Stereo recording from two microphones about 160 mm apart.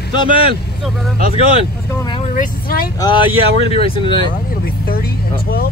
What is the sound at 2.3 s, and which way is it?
Speech, 70° left (ahead or behind).